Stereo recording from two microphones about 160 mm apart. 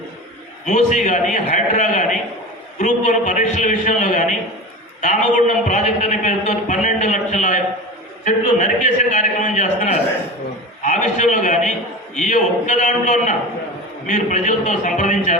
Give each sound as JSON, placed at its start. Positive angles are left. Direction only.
{"t": 0.6, "sound": "a man's voice", "side_deg": 50}